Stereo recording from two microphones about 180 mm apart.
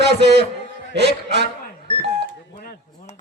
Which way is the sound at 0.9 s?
70° right (ahead or behind).